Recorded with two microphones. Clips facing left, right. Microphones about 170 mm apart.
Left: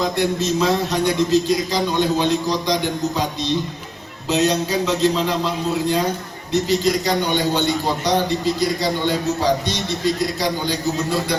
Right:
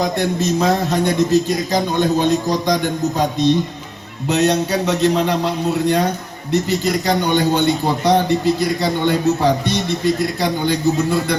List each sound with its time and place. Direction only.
0.0 s a man's voice: 50° right (ahead or behind)
4.3 s a man's voice: 60° right (ahead or behind)